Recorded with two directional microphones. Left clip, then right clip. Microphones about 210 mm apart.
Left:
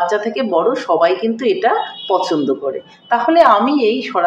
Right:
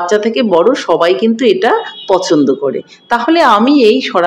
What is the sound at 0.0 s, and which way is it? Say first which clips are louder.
Speech: right 5 dB; 55° right (ahead or behind).